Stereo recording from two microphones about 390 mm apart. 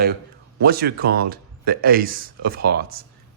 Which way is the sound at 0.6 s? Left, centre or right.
Right.